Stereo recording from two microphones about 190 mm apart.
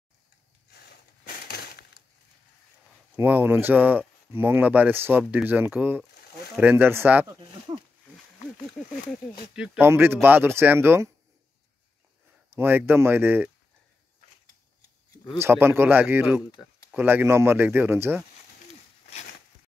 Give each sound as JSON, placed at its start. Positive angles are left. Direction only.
{"t": 0.7, "sound": "crushing", "side_deg": 55}
{"t": 3.2, "sound": "speech", "side_deg": -10}
{"t": 9.6, "sound": "speech", "side_deg": -10}
{"t": 12.5, "sound": "speech", "side_deg": -10}
{"t": 15.3, "sound": "speech", "side_deg": -10}